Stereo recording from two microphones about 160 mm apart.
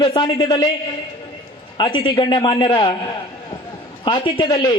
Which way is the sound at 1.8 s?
30° left (ahead or behind).